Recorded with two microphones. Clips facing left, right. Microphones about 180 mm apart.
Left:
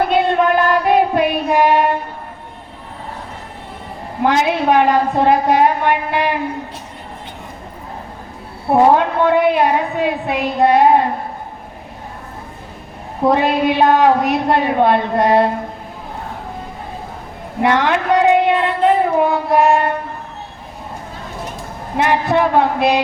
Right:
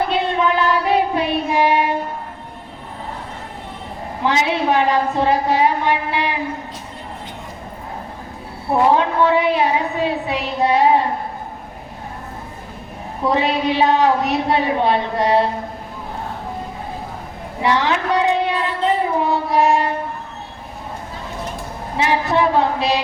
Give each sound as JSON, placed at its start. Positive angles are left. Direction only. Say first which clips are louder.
{"t": 0.1, "sound": "child singing", "louder": "left 4 dB", "side_deg": 55}
{"t": 4.2, "sound": "a woman's voice", "louder": "left 3 dB", "side_deg": 50}
{"t": 8.9, "sound": "a woman's voice", "louder": "left 2 dB", "side_deg": 55}
{"t": 13.2, "sound": "a woman's voice", "louder": "left 4 dB", "side_deg": 55}
{"t": 17.6, "sound": "a sound", "louder": "left 3 dB", "side_deg": 55}
{"t": 21.9, "sound": "a sound", "louder": "left 3 dB", "side_deg": 55}